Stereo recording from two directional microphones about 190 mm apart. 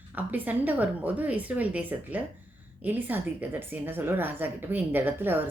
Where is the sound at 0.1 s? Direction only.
10° right (ahead or behind).